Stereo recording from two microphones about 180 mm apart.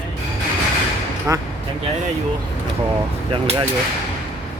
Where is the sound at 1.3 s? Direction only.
15° right (ahead or behind).